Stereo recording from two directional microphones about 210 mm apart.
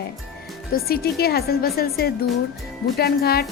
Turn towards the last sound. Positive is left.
turn(degrees=50)  # may be behind; listen again after turning